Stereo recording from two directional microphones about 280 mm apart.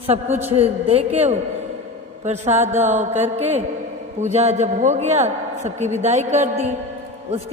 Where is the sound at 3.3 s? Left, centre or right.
Right.